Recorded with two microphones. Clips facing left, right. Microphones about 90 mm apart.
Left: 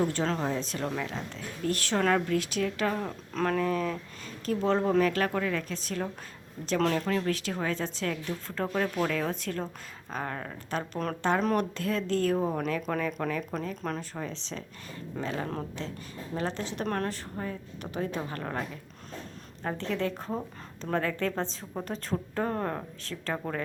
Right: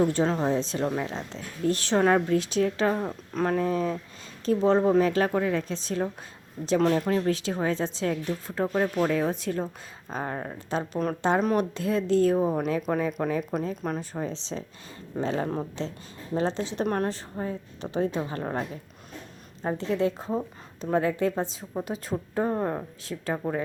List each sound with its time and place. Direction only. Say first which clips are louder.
0.0 s speech: right 5 dB; 15° right (ahead or behind)
10.9 s speech: right 3 dB; 5° right (ahead or behind); by 18.6 s 20° right (ahead or behind)
19.6 s speech: right 5 dB; 15° right (ahead or behind)